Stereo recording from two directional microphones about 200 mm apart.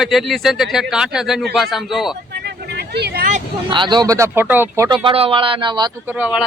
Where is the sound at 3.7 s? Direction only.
25° right (ahead or behind).